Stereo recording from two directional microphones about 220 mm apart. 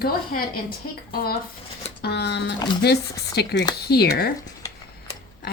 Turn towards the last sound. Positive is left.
turn(degrees=45)  # may be behind; listen again after turning